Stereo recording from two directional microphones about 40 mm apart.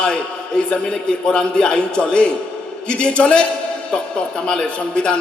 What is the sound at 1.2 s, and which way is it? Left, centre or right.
A man's voice, left.